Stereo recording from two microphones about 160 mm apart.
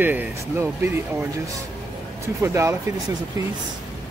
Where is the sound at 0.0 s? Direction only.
10° right (ahead or behind).